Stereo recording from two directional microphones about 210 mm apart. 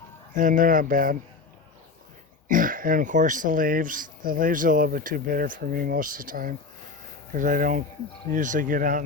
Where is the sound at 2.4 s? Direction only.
40° right (ahead or behind).